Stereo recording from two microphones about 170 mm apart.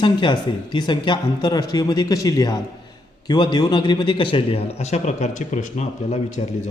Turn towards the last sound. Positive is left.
turn(degrees=40)  # may be behind; listen again after turning